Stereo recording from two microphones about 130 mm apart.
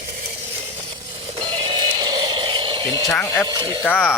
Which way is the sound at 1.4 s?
35° right (ahead or behind).